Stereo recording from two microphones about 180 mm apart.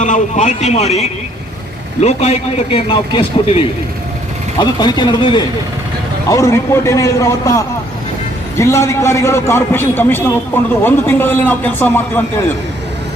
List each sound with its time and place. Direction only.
0.0 s a man's voice: 45° left (ahead or behind); by 12.5 s 10° left (ahead or behind)